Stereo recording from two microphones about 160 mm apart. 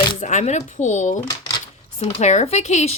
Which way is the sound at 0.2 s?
50° left (ahead or behind).